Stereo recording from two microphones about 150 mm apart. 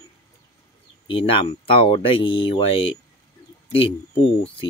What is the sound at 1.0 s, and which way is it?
Speech, 35° left (ahead or behind).